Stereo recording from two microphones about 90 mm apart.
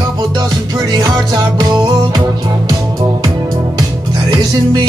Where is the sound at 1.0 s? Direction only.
45° right (ahead or behind).